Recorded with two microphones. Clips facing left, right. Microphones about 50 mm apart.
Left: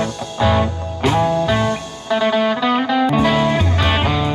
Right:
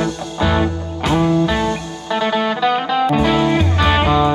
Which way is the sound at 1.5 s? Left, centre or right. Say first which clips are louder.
Even; left.